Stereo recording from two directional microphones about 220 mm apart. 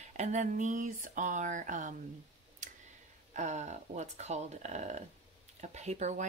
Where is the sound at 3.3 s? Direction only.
35° right (ahead or behind).